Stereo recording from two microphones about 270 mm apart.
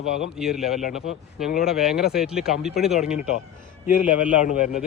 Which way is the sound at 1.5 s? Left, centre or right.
Left.